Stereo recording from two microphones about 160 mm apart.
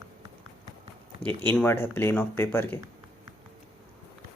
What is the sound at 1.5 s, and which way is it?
Speech, 15° left (ahead or behind).